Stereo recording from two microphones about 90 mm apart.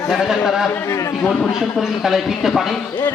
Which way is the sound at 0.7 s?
30° left (ahead or behind).